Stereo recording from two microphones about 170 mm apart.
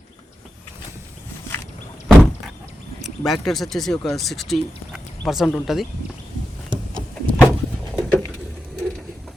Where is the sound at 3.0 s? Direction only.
Centre (ahead or behind).